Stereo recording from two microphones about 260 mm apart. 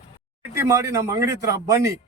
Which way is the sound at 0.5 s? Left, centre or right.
Centre.